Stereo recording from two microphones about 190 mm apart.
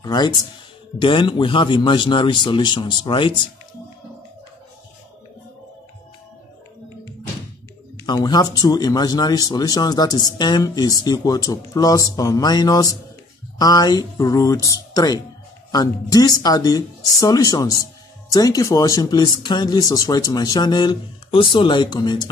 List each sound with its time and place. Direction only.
0.0 s speech: 20° left (ahead or behind)
8.0 s speech: 20° left (ahead or behind)